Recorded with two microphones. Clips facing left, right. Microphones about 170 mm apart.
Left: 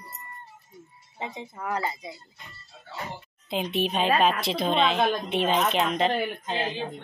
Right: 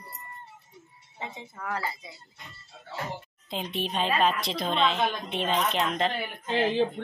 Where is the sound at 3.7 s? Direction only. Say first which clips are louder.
Left 3 dB; 10° left (ahead or behind).